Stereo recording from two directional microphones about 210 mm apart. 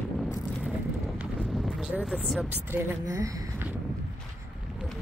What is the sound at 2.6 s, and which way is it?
Speech, 10° right (ahead or behind).